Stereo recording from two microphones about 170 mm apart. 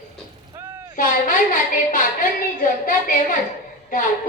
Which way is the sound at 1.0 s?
55° left (ahead or behind).